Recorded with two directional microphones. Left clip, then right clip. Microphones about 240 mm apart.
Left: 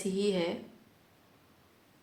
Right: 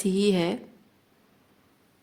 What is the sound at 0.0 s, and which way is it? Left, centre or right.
Speech, right.